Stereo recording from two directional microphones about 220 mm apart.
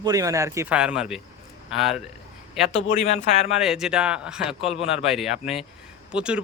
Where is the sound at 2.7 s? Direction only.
30° left (ahead or behind).